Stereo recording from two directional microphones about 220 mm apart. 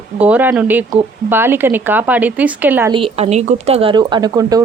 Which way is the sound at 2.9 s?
25° right (ahead or behind).